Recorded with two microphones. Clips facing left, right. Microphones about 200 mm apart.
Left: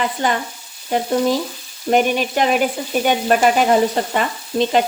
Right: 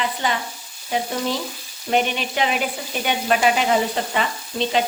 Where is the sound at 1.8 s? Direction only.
45° left (ahead or behind).